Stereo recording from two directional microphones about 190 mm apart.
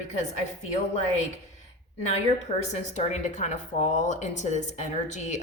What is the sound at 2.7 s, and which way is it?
Speech, 40° left (ahead or behind).